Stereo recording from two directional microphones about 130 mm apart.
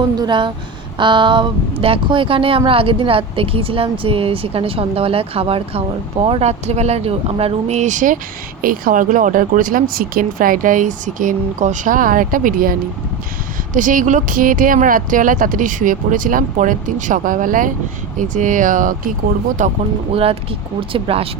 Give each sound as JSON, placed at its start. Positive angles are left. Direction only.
{"t": 0.2, "sound": "a woman's voice", "side_deg": -35}
{"t": 13.7, "sound": "speech", "side_deg": -85}
{"t": 18.2, "sound": "speech", "side_deg": -75}
{"t": 19.6, "sound": "speech", "side_deg": -75}
{"t": 20.9, "sound": "a woman's voice", "side_deg": -45}